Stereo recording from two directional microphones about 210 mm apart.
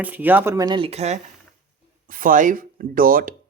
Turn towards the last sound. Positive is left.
turn(degrees=-40)  # may be behind; listen again after turning